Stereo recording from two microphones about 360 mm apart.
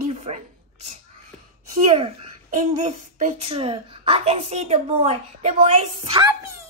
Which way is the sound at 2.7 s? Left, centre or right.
Centre.